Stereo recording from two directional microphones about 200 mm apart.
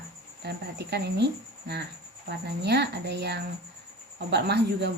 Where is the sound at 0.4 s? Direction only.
55° right (ahead or behind).